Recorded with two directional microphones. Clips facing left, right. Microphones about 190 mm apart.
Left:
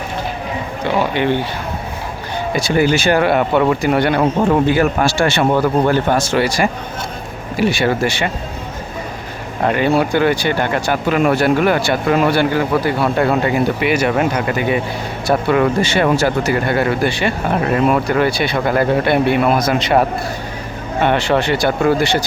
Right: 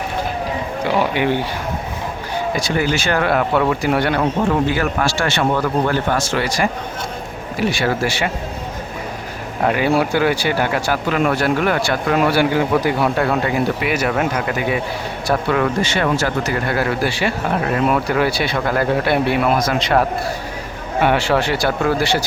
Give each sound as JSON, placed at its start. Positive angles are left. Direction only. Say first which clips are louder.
{"t": 0.9, "sound": "speech", "louder": "left 2 dB", "side_deg": -10}
{"t": 2.6, "sound": "speech", "louder": "left 8 dB", "side_deg": 15}
{"t": 3.2, "sound": "speech", "louder": "left 3 dB", "side_deg": 0}
{"t": 4.8, "sound": "speech", "louder": "left 5 dB", "side_deg": 25}
{"t": 7.5, "sound": "speech", "louder": "left 3 dB", "side_deg": 0}
{"t": 9.6, "sound": "speech", "louder": "left 2 dB", "side_deg": -5}
{"t": 12.4, "sound": "speech", "louder": "even", "side_deg": -15}
{"t": 13.1, "sound": "speech", "louder": "left 3 dB", "side_deg": 0}
{"t": 16.1, "sound": "speech", "louder": "left 4 dB", "side_deg": 30}
{"t": 16.5, "sound": "speech", "louder": "left 4 dB", "side_deg": 0}